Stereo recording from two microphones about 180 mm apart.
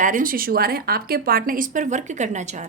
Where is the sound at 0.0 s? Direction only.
50° right (ahead or behind).